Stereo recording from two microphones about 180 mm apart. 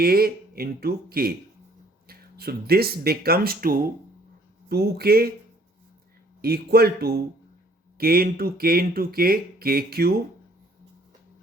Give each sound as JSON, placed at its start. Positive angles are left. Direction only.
{"t": 0.0, "sound": "speech", "side_deg": -55}
{"t": 6.4, "sound": "speech", "side_deg": -60}